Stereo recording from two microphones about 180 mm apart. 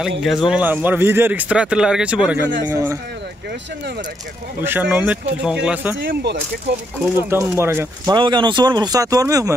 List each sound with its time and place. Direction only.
0.2 s speech: centre (ahead or behind)
4.6 s speech: 10° right (ahead or behind)
7.2 s speech: 15° right (ahead or behind)
8.2 s speech: 25° right (ahead or behind)